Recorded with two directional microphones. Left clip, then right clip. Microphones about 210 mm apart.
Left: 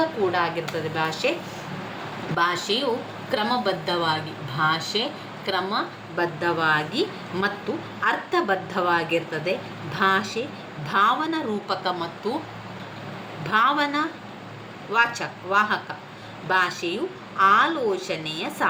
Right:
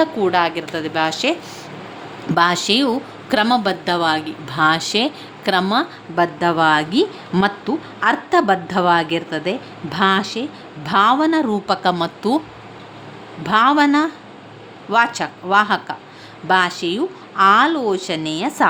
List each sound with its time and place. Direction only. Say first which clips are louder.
0.3 s a woman's voice: right 6 dB; 55° right (ahead or behind)
2.3 s a woman's voice: right 8 dB; 55° right (ahead or behind)
13.4 s a woman's voice: right 7 dB; 50° right (ahead or behind)